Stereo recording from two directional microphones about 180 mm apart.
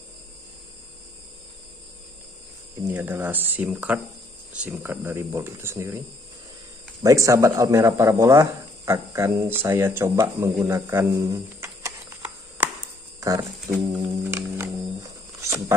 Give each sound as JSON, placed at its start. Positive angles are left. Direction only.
{"t": 2.7, "sound": "speech", "side_deg": -10}
{"t": 10.7, "sound": "a sound", "side_deg": -15}
{"t": 13.2, "sound": "speech", "side_deg": -20}
{"t": 14.2, "sound": "music", "side_deg": -15}